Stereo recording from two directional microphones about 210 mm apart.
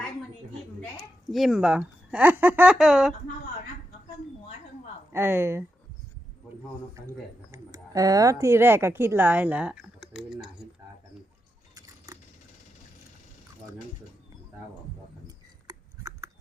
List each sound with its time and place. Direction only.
0.9 s speech: centre (ahead or behind)
5.1 s speech: 10° right (ahead or behind)
7.5 s a woman's voice: 15° right (ahead or behind)
15.6 s a sound: 15° right (ahead or behind)